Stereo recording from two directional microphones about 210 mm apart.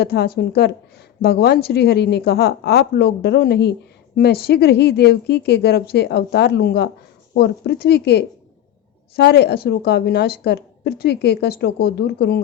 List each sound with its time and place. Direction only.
0.0 s a woman's voice: 50° left (ahead or behind)